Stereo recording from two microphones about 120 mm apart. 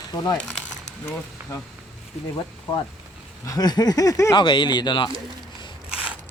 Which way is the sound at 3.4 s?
30° left (ahead or behind).